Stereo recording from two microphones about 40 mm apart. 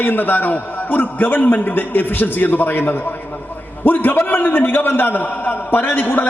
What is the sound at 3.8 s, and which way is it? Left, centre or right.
A man's voice, left.